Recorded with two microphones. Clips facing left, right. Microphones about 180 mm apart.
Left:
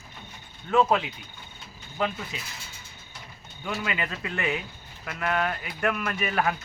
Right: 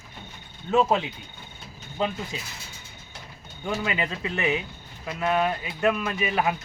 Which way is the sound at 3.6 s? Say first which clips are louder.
Right 3 dB; 25° right (ahead or behind).